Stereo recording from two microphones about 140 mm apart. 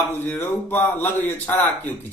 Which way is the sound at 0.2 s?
15° left (ahead or behind).